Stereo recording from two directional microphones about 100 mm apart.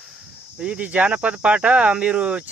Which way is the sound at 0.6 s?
10° right (ahead or behind).